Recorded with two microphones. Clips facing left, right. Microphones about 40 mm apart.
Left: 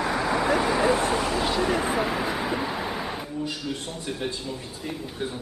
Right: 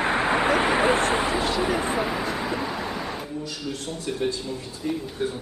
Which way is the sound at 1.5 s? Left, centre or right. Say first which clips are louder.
Even; centre.